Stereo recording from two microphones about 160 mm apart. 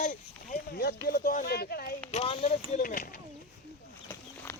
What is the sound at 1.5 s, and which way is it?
Speech, 75° left (ahead or behind).